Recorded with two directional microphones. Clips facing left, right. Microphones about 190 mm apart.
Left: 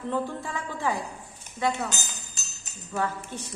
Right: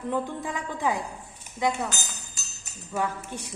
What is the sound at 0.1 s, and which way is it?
Speech, 15° right (ahead or behind).